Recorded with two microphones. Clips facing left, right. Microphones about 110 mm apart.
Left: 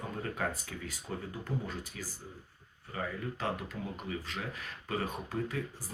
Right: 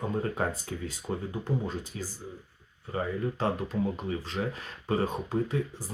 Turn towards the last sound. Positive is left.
turn(degrees=-30)  # may be behind; listen again after turning